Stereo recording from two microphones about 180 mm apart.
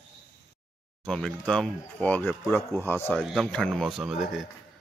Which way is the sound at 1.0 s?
5° left (ahead or behind).